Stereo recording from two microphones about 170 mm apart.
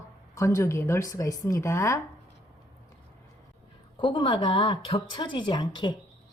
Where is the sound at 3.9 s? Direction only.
30° left (ahead or behind).